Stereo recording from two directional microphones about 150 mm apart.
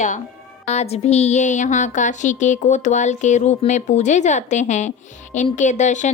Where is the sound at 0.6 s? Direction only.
45° left (ahead or behind).